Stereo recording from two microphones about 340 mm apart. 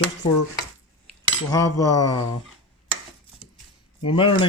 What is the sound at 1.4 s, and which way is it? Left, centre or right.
Speech, centre.